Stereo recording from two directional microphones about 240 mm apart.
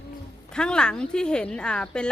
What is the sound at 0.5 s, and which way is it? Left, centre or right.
Speech, centre.